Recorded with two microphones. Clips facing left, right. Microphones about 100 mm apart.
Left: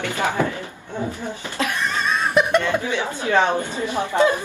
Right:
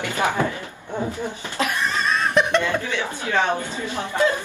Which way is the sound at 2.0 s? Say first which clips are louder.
Left 1 dB; 5° left (ahead or behind).